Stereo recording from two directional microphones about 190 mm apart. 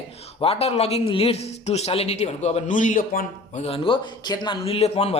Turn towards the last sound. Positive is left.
turn(degrees=30)  # may be behind; listen again after turning